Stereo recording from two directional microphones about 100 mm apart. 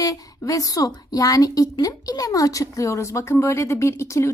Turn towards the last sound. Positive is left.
turn(degrees=30)  # may be behind; listen again after turning